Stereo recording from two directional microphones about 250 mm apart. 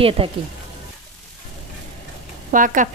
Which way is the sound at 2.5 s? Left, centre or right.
Right.